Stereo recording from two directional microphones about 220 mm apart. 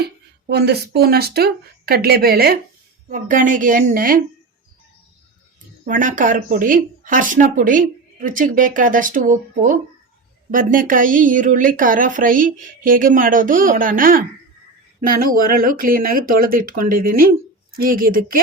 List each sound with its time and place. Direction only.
0.4 s speech: 45° right (ahead or behind)
5.8 s speech: 40° right (ahead or behind)